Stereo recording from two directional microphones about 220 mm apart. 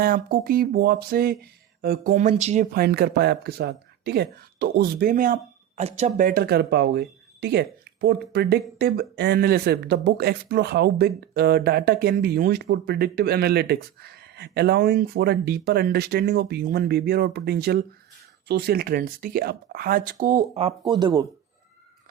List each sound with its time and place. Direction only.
0.0 s speech: 40° right (ahead or behind)
2.1 s speech: 30° right (ahead or behind)
2.7 s speech: 45° right (ahead or behind); by 21.2 s 20° right (ahead or behind)